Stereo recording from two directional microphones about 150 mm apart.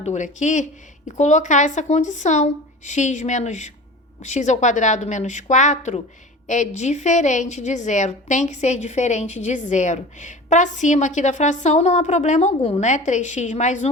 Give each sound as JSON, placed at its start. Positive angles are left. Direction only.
{"t": 0.0, "sound": "a woman's voice", "side_deg": 55}